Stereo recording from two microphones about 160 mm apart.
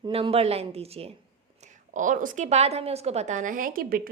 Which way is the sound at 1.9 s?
55° right (ahead or behind).